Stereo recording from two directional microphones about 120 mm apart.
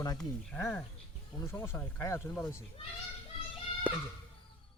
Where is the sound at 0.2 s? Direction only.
10° left (ahead or behind).